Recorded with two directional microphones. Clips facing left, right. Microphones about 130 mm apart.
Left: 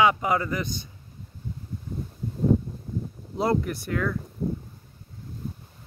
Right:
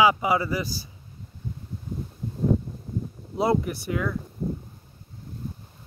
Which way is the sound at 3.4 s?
Centre (ahead or behind).